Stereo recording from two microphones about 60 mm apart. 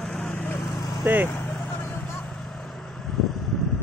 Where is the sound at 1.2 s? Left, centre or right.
Left.